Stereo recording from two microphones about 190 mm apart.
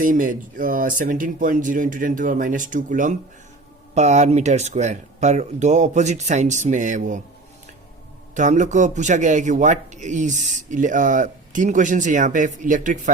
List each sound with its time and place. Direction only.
0.0 s speech: 45° right (ahead or behind)
8.4 s speech: 40° right (ahead or behind)